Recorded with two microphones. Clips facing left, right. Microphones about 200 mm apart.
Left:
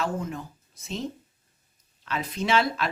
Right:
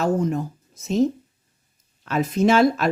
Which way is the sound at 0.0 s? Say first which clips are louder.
Right 9 dB; 40° right (ahead or behind).